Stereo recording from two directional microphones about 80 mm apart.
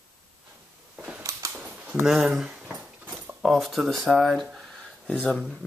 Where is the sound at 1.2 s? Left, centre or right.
Right.